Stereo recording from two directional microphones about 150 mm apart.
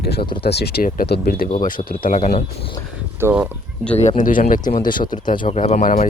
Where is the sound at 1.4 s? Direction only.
65° left (ahead or behind).